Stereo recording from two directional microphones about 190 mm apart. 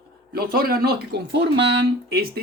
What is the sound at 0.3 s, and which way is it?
Speech, 50° right (ahead or behind).